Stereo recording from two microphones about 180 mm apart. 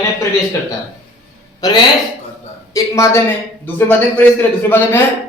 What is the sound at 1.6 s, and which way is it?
A man's voice, 20° left (ahead or behind).